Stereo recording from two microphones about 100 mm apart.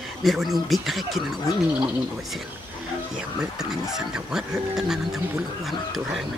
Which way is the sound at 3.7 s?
5° right (ahead or behind).